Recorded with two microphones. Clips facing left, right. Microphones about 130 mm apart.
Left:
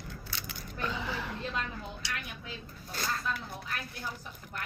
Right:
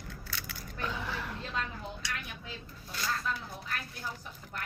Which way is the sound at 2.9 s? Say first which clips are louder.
Even; 45° left (ahead or behind).